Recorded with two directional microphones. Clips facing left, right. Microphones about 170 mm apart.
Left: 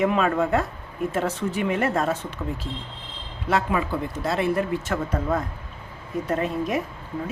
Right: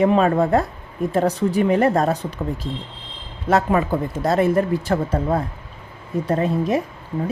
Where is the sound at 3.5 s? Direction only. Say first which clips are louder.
Right 6 dB; 45° right (ahead or behind).